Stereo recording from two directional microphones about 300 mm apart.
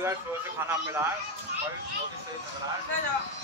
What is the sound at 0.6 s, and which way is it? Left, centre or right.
Speech, centre.